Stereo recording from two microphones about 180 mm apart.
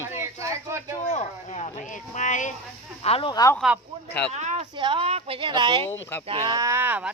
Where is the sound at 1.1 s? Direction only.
40° left (ahead or behind).